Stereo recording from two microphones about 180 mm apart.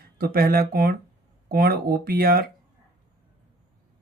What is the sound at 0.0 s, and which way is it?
Speech, 55° right (ahead or behind).